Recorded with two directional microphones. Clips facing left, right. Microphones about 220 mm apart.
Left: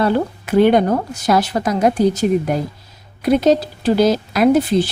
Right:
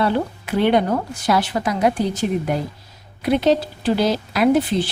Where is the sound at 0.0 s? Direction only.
45° left (ahead or behind).